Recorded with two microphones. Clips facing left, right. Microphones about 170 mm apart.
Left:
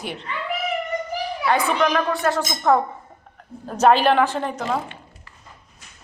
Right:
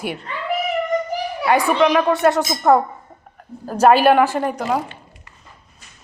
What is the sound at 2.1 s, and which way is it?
Speech, 25° right (ahead or behind).